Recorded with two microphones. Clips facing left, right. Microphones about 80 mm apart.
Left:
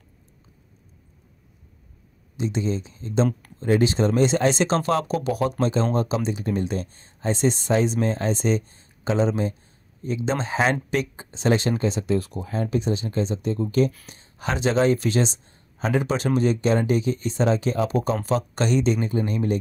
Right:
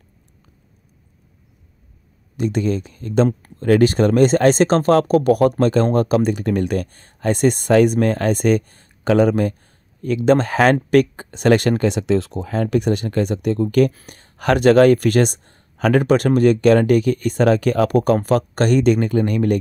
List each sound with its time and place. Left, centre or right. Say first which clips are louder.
2.3 s speech: right 6 dB; right